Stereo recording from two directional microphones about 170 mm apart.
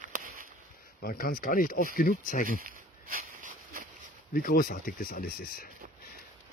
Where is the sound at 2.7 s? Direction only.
55° right (ahead or behind).